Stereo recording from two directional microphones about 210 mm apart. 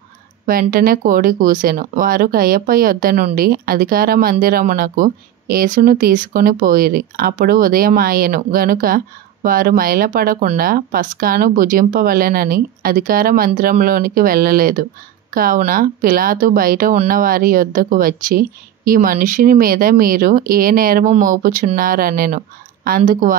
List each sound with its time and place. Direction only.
0.5 s speech: 45° right (ahead or behind)